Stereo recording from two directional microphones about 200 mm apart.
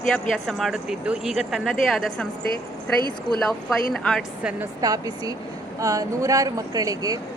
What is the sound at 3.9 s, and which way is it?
Speech, centre (ahead or behind).